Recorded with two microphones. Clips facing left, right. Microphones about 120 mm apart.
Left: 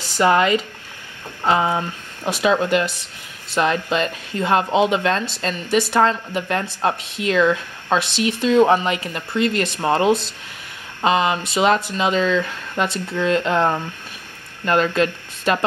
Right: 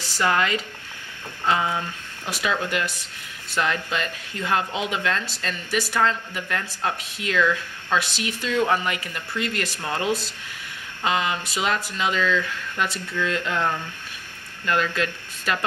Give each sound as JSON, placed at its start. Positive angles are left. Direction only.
{"t": 0.2, "sound": "speech", "side_deg": 20}